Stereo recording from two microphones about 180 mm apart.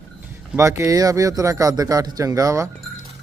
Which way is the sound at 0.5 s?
15° right (ahead or behind).